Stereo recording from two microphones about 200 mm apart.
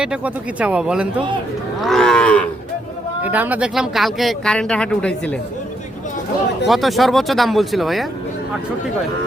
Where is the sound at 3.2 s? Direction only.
10° right (ahead or behind).